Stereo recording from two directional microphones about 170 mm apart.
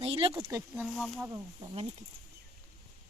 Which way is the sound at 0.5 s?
10° right (ahead or behind).